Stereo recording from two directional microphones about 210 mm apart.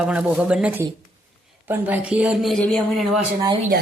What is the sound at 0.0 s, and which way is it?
Speech, 5° right (ahead or behind).